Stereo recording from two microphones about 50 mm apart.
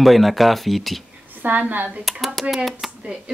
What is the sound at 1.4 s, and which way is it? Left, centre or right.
Speech, right.